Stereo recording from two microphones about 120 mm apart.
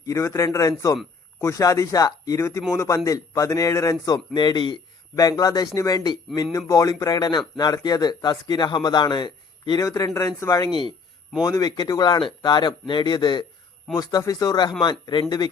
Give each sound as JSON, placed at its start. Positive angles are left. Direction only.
{"t": 0.0, "sound": "a man's voice", "side_deg": 25}